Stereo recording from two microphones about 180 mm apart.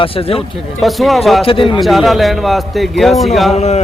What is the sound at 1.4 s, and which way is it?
Speech, 30° left (ahead or behind).